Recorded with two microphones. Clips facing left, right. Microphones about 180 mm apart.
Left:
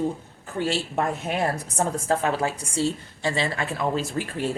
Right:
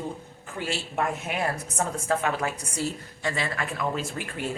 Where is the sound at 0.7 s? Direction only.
35° left (ahead or behind).